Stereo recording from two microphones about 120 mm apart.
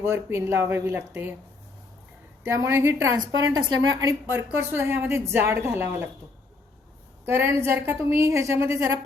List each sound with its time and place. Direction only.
0.0 s a woman's voice: 25° right (ahead or behind)
2.4 s a woman's voice: 25° right (ahead or behind)
4.3 s a woman's voice: 20° right (ahead or behind)
7.3 s a woman's voice: 20° right (ahead or behind)